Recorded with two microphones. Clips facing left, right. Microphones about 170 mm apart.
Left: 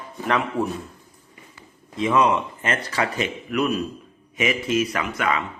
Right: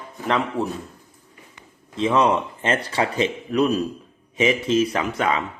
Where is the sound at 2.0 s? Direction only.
35° right (ahead or behind).